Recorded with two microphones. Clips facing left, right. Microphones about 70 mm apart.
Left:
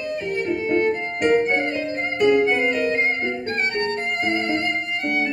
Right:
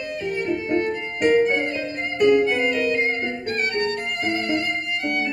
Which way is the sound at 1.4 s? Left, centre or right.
Left.